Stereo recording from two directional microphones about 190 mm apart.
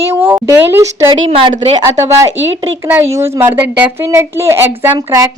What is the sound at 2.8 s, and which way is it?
A woman's voice, 15° right (ahead or behind).